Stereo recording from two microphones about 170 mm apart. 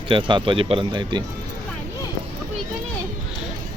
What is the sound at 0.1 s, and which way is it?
Speech, 30° right (ahead or behind).